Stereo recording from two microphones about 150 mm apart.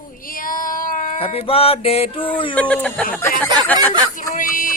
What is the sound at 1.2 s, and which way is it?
Music, 40° left (ahead or behind).